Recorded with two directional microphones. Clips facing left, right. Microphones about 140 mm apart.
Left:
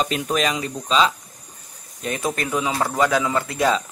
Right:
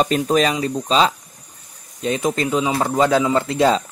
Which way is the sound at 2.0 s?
25° right (ahead or behind).